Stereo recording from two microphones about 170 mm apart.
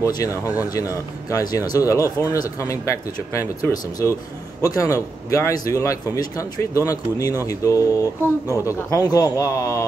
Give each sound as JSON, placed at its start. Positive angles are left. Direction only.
{"t": 0.0, "sound": "a man's voice", "side_deg": 20}